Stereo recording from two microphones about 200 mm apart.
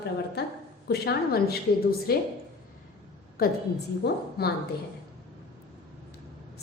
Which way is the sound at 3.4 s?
50° left (ahead or behind).